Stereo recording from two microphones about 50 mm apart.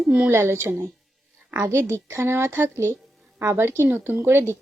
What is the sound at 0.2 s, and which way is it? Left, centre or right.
Speech, right.